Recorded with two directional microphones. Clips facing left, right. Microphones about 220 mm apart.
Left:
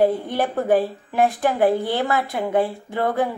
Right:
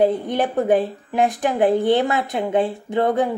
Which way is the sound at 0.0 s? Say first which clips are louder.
Right 1 dB; 20° right (ahead or behind).